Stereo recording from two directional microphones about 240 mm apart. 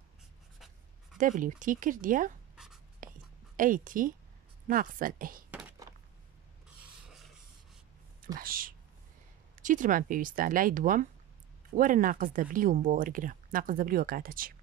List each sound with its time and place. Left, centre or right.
1.1 s speech: right
2.5 s writing: centre
3.0 s whispering: right
3.5 s speech: right
5.5 s thunk: centre
8.4 s a sound: right
9.6 s speech: right